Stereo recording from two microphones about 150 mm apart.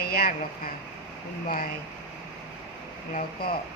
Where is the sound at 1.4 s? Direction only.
70° left (ahead or behind).